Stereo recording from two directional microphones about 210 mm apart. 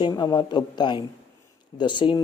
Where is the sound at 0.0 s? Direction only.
20° left (ahead or behind).